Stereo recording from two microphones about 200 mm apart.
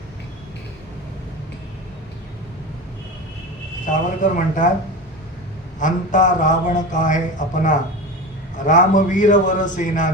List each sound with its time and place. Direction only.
4.2 s a man's voice: 40° left (ahead or behind)
5.8 s a man's voice: 40° left (ahead or behind)